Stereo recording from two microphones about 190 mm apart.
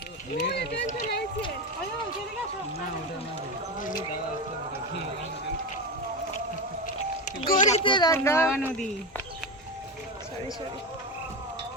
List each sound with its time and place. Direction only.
0.4 s speech: 60° left (ahead or behind)
0.9 s speech: 40° left (ahead or behind)
6.8 s music: 45° left (ahead or behind)
7.9 s speech: 25° left (ahead or behind)
8.1 s speech: 15° left (ahead or behind)
8.4 s speech: 5° right (ahead or behind)